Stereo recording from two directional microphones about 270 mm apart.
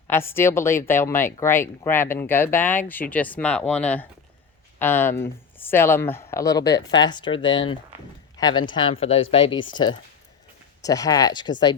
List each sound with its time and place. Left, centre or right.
0.1 s speech: centre